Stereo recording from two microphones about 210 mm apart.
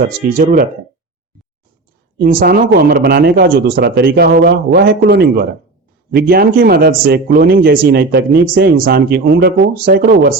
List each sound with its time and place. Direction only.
0.3 s speech: 45° right (ahead or behind)
2.1 s speech: 45° right (ahead or behind)